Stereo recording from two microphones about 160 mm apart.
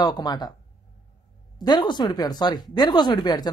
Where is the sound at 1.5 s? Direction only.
25° left (ahead or behind).